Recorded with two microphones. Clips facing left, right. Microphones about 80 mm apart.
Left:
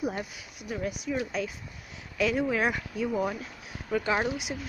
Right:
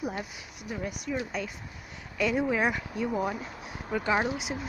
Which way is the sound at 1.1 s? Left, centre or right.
Centre.